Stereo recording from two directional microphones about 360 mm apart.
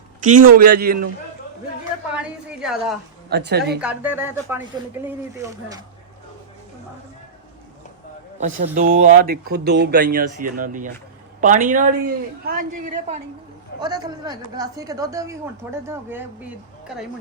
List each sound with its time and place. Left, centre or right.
0.6 s speech: right
2.1 s speech: centre
3.2 s speech: right
3.8 s speech: centre
8.4 s speech: right; by 17.1 s centre